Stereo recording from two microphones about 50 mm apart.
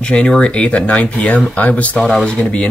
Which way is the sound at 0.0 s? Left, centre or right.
Centre.